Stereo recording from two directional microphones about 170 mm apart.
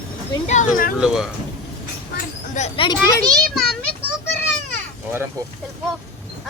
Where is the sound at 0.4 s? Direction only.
45° left (ahead or behind).